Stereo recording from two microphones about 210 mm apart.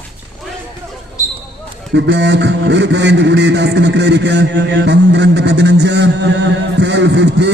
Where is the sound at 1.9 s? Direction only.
55° right (ahead or behind).